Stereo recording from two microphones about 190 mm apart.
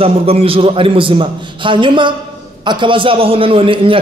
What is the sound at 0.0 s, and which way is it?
A man's voice, 30° right (ahead or behind).